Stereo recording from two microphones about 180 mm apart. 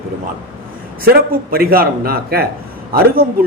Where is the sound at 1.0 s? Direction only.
55° right (ahead or behind).